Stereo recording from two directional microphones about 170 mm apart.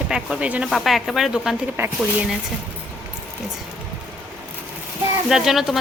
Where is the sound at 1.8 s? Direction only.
15° right (ahead or behind).